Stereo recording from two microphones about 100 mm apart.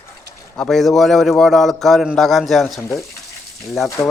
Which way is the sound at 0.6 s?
5° left (ahead or behind).